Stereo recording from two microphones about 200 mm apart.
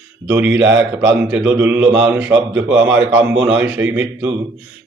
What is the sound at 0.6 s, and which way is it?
Speech, 60° right (ahead or behind).